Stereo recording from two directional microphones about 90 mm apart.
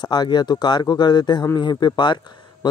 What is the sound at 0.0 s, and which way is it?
Speech, 55° left (ahead or behind).